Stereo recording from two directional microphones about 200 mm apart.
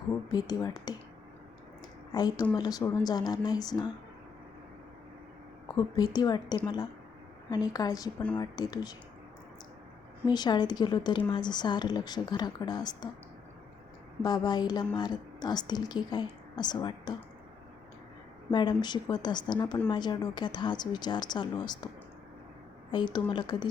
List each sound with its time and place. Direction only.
0.1 s a woman's voice: 20° left (ahead or behind)
2.1 s a woman's voice: 20° left (ahead or behind)
5.6 s a woman's voice: 20° left (ahead or behind)
10.2 s a woman's voice: 20° left (ahead or behind)
14.2 s a woman's voice: 20° left (ahead or behind)
18.5 s a woman's voice: 20° left (ahead or behind)
22.9 s a woman's voice: 20° left (ahead or behind)